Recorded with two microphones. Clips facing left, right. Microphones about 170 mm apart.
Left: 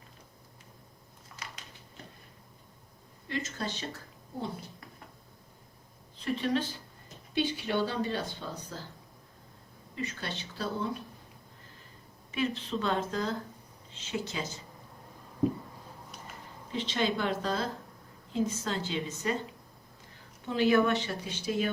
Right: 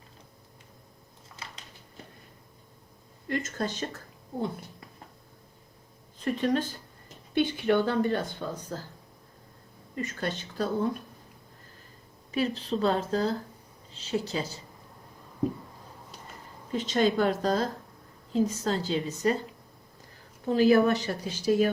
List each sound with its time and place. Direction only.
3.2 s a woman's voice: 50° right (ahead or behind)
6.1 s a woman's voice: 45° right (ahead or behind)
9.9 s a woman's voice: 45° right (ahead or behind)
12.3 s speech: 35° right (ahead or behind)
16.7 s a woman's voice: 45° right (ahead or behind)
20.4 s speech: 40° right (ahead or behind)